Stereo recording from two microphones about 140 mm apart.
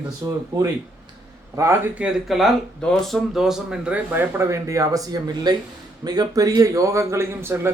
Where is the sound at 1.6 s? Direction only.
20° right (ahead or behind).